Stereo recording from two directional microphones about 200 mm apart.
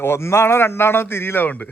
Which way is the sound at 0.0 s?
10° left (ahead or behind).